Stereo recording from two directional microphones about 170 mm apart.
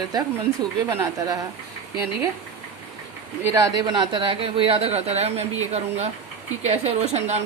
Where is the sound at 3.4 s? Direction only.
20° right (ahead or behind).